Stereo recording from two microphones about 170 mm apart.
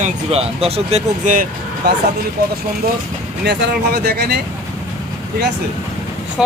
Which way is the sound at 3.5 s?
75° right (ahead or behind).